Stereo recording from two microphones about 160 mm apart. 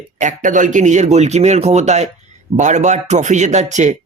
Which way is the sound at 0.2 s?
50° right (ahead or behind).